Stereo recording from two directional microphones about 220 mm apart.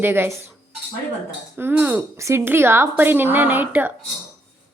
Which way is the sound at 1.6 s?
10° right (ahead or behind).